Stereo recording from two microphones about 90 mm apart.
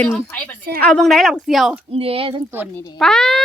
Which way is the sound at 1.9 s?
90° right.